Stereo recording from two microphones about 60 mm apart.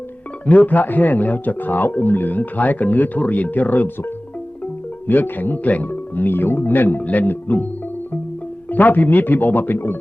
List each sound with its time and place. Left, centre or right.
0.4 s speech: left
8.7 s speech: left